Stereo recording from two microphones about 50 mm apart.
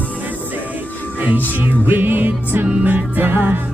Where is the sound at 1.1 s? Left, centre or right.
Right.